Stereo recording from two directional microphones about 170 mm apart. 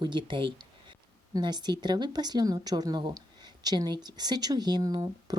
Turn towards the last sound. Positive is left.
turn(degrees=-25)  # may be behind; listen again after turning